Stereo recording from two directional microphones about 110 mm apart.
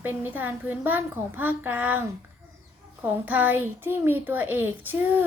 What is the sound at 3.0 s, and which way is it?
A woman's voice, 15° right (ahead or behind).